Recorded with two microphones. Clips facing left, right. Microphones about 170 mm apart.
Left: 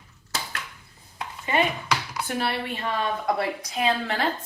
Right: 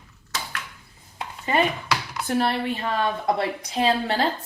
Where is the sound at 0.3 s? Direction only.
35° left (ahead or behind).